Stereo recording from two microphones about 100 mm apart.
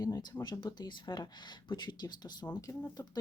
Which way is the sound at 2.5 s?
35° left (ahead or behind).